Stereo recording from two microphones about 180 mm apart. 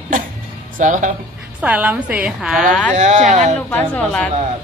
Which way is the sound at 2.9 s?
40° right (ahead or behind).